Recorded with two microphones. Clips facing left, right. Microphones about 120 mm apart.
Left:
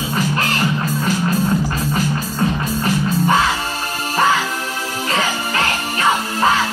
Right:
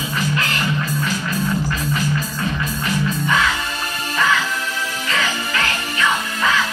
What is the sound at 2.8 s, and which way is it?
Music, 35° left (ahead or behind).